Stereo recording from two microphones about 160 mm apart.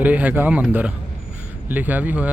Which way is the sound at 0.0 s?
10° right (ahead or behind).